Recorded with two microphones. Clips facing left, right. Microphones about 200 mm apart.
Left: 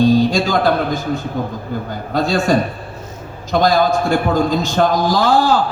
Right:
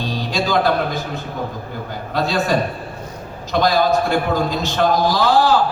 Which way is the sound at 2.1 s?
50° left (ahead or behind).